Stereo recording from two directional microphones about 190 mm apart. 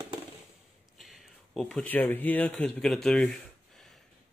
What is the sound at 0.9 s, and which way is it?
Speech, centre (ahead or behind).